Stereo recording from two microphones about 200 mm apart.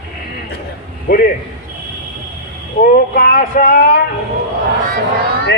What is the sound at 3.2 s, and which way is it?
Speech, 45° left (ahead or behind).